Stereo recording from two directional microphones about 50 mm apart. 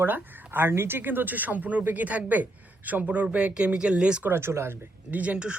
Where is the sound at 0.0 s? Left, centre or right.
Right.